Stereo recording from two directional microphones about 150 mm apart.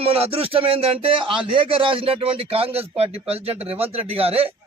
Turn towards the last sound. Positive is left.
turn(degrees=-40)  # may be behind; listen again after turning